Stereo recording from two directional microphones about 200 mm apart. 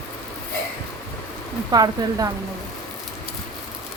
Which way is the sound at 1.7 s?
20° right (ahead or behind).